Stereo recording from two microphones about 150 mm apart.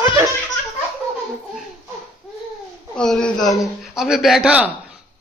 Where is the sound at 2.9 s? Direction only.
5° left (ahead or behind).